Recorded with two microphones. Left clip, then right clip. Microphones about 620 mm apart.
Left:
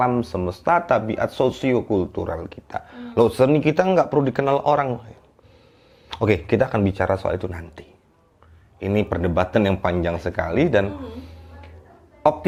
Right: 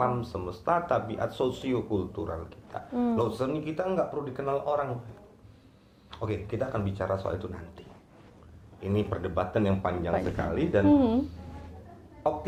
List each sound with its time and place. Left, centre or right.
0.2 s speech: left
6.1 s speech: left